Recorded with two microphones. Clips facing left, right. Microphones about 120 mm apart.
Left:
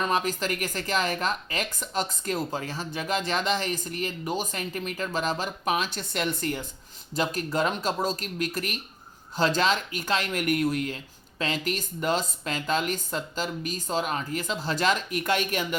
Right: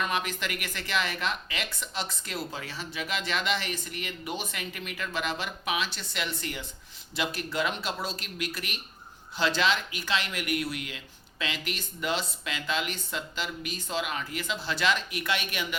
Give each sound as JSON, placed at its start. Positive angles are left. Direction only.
{"t": 0.0, "sound": "speech", "side_deg": 40}